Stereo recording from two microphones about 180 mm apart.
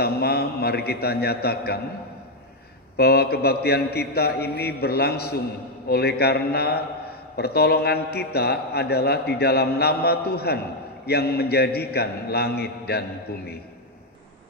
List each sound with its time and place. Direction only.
0.0 s a man's voice: 60° left (ahead or behind)
3.0 s a man's voice: 60° left (ahead or behind)